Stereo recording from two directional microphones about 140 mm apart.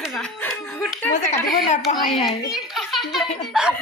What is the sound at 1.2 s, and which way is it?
Speech, 55° left (ahead or behind).